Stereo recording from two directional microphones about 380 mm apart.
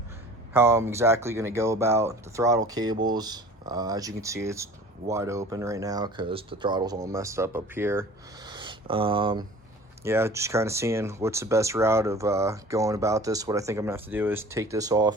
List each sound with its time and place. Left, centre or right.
0.5 s speech: centre
8.4 s a sound: centre
10.0 s speech: centre